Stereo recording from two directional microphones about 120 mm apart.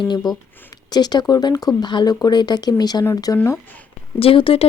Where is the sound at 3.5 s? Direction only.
15° left (ahead or behind).